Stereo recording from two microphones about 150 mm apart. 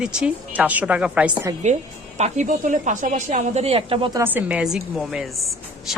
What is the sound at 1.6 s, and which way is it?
A woman's voice, 50° right (ahead or behind).